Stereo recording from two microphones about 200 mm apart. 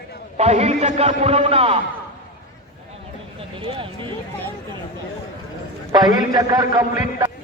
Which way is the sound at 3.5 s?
25° right (ahead or behind).